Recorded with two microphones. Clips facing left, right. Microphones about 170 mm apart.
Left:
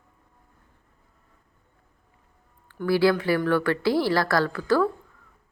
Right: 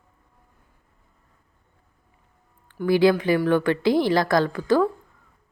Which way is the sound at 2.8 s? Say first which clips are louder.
Right 3 dB; 20° right (ahead or behind).